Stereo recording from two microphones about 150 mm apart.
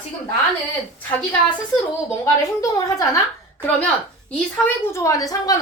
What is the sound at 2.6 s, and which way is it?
Speech, 20° left (ahead or behind).